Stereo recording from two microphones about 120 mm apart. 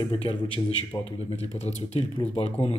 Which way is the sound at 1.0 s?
60° left (ahead or behind).